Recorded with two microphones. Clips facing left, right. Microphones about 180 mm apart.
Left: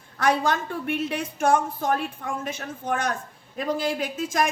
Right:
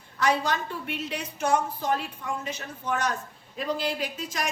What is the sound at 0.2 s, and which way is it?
A woman's voice, 50° left (ahead or behind).